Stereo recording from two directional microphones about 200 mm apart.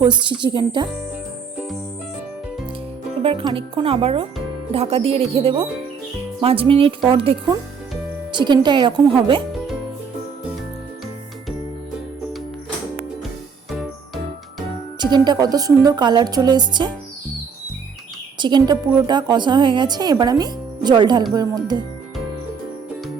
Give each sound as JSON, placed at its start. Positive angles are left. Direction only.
{"t": 0.3, "sound": "speech", "side_deg": -25}
{"t": 3.2, "sound": "speech", "side_deg": -25}
{"t": 14.9, "sound": "speech", "side_deg": -20}
{"t": 18.3, "sound": "a woman's voice", "side_deg": -20}